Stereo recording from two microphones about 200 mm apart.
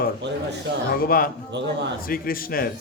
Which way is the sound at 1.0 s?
45° left (ahead or behind).